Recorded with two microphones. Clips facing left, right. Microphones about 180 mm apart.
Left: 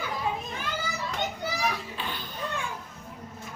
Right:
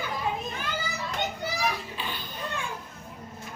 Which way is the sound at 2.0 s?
5° right (ahead or behind).